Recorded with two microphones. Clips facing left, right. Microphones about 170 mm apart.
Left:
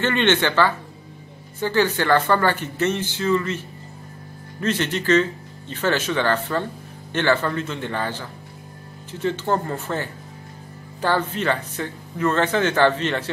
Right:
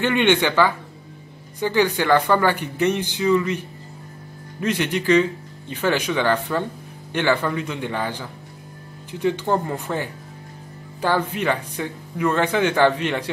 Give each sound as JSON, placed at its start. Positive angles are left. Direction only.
{"t": 0.0, "sound": "speech", "side_deg": -15}